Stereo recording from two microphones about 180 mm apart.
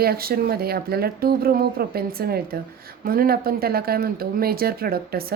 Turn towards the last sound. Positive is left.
turn(degrees=-55)  # may be behind; listen again after turning